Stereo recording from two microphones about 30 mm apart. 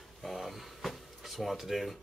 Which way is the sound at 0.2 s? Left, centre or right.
Centre.